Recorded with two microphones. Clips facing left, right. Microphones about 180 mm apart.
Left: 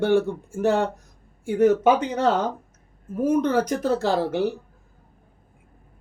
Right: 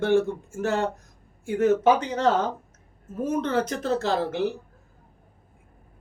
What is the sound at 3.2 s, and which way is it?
Speech, 10° left (ahead or behind).